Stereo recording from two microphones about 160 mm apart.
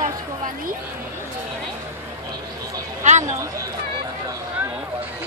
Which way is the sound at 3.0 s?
45° right (ahead or behind).